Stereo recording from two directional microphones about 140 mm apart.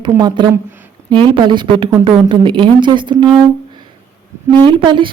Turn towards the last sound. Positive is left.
turn(degrees=-35)  # may be behind; listen again after turning